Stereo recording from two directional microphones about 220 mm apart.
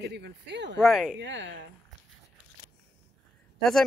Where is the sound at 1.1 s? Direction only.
55° right (ahead or behind).